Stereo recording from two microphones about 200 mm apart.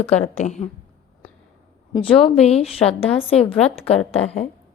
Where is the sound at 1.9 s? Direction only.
30° left (ahead or behind).